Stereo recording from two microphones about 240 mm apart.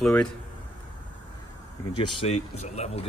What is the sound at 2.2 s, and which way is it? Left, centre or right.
Speech, left.